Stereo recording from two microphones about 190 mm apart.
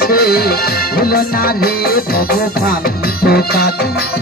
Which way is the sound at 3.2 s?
55° left (ahead or behind).